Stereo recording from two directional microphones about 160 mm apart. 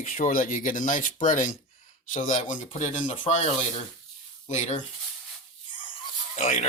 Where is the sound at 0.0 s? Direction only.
55° left (ahead or behind).